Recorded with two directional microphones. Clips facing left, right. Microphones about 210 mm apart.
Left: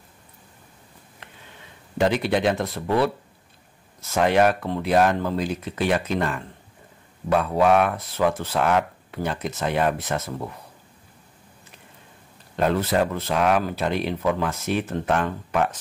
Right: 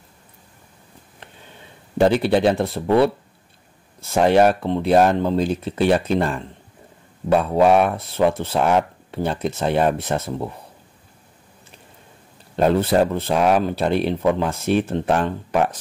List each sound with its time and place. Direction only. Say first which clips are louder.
2.0 s speech: right 5 dB; 30° right (ahead or behind)
12.5 s speech: right 5 dB; 30° right (ahead or behind)